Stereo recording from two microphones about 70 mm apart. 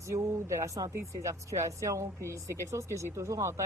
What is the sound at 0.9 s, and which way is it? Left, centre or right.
Speech, right.